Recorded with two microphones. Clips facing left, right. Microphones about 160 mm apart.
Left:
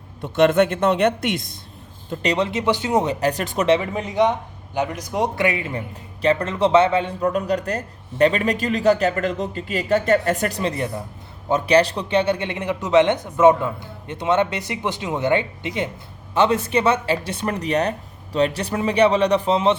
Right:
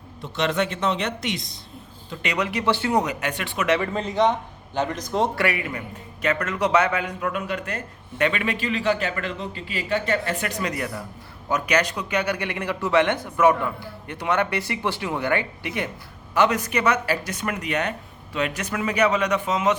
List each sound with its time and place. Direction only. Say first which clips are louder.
0.2 s a man's voice: left 8 dB; 55° left (ahead or behind)
2.2 s a man's voice: left 3 dB; 30° left (ahead or behind)
3.7 s a man's voice: left 3 dB; 15° left (ahead or behind); by 19.7 s 30° left (ahead or behind)